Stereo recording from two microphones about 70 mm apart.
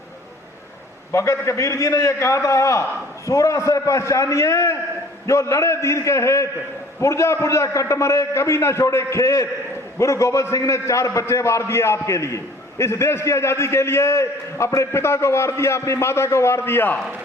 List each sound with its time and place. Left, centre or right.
1.1 s a man's voice: left